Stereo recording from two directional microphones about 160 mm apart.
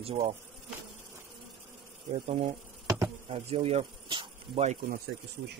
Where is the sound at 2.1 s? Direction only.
45° right (ahead or behind); by 4.6 s 30° right (ahead or behind).